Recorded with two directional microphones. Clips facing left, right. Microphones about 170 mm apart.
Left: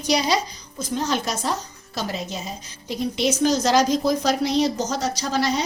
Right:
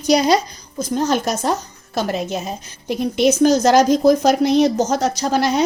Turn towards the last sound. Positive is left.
turn(degrees=-55)  # may be behind; listen again after turning